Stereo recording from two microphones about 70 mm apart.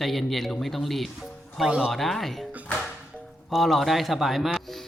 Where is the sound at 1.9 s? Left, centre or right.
Centre.